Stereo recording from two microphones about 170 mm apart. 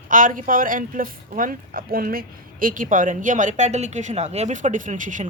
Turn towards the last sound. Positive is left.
turn(degrees=-50)  # may be behind; listen again after turning